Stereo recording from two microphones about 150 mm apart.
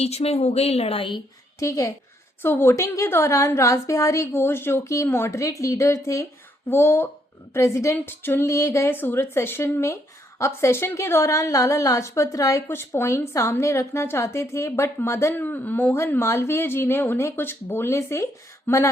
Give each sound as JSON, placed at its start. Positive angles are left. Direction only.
{"t": 0.0, "sound": "speech", "side_deg": 45}
{"t": 1.5, "sound": "a woman's voice", "side_deg": 20}